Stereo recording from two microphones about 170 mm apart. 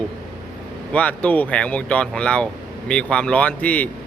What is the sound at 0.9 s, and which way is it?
Speech, 10° left (ahead or behind).